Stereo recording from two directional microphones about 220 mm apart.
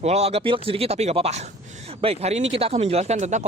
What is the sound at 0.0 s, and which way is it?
Speech, 30° right (ahead or behind).